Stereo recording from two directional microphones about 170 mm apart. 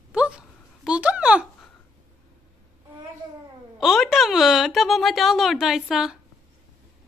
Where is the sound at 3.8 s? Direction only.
Centre (ahead or behind).